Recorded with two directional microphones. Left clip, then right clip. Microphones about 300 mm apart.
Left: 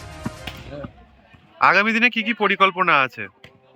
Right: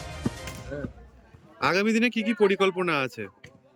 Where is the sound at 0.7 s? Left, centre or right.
Centre.